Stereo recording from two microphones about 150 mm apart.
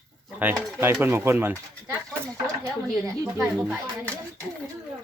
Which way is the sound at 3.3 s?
5° right (ahead or behind).